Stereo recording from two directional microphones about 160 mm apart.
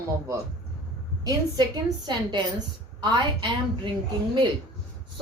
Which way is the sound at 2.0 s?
25° right (ahead or behind).